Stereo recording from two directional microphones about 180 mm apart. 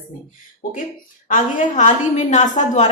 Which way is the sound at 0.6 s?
50° left (ahead or behind).